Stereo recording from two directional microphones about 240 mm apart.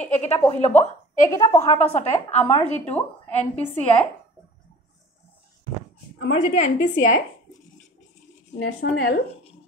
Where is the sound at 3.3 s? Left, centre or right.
Left.